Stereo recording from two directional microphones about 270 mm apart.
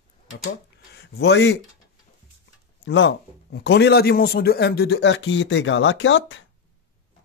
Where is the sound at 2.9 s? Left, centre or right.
Left.